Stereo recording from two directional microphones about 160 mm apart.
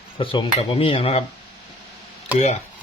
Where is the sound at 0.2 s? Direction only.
35° left (ahead or behind).